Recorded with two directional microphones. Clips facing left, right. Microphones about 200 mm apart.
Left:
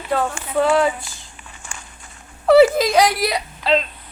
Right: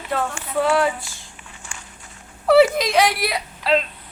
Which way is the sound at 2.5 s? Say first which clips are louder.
Left 3 dB; centre (ahead or behind).